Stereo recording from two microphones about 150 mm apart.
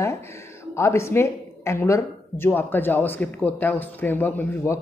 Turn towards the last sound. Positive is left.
turn(degrees=15)  # may be behind; listen again after turning